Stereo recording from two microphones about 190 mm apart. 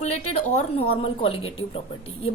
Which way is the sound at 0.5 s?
30° left (ahead or behind).